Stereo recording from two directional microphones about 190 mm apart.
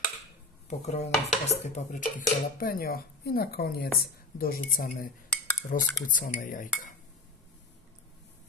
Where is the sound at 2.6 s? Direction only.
50° left (ahead or behind).